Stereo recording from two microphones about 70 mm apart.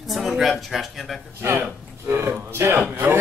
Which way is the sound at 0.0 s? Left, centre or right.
Centre.